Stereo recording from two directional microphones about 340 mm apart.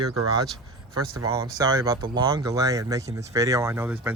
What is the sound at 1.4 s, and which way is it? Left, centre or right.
Speech, centre.